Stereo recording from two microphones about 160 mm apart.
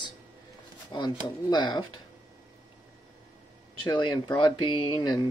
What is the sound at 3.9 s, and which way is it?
Speech, 25° left (ahead or behind).